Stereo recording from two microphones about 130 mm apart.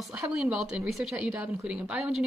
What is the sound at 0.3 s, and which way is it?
Speech, 5° right (ahead or behind).